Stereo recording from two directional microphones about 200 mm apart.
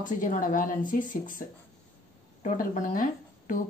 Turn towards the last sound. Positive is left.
turn(degrees=40)  # may be behind; listen again after turning